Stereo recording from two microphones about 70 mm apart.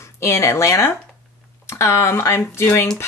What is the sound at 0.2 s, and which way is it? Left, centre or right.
Speech, left.